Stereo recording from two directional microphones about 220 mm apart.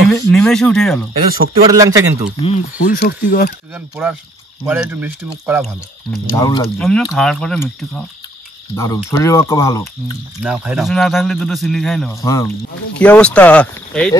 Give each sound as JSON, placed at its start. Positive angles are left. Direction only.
{"t": 0.1, "sound": "speech", "side_deg": 0}
{"t": 1.7, "sound": "speech", "side_deg": -15}
{"t": 2.3, "sound": "speech", "side_deg": 25}
{"t": 2.8, "sound": "speech", "side_deg": 40}
{"t": 3.7, "sound": "speech", "side_deg": -10}
{"t": 6.3, "sound": "speech", "side_deg": 15}
{"t": 6.8, "sound": "a man's voice", "side_deg": 0}
{"t": 10.4, "sound": "a man's voice", "side_deg": -5}
{"t": 12.1, "sound": "a man's voice", "side_deg": 15}